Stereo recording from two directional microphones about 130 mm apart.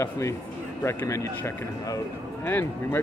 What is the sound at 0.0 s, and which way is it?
Speech, 25° left (ahead or behind).